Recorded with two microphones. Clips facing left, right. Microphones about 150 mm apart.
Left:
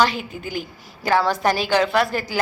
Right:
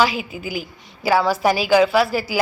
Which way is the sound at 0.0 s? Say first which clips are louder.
Right 1 dB; 5° right (ahead or behind).